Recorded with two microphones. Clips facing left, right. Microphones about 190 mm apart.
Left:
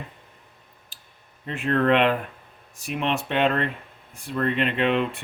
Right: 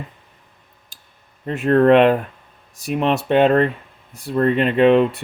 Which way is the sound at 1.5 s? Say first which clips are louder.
Right 8 dB; 40° right (ahead or behind).